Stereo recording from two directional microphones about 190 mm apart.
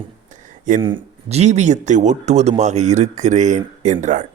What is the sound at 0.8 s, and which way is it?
A man's voice, 30° right (ahead or behind).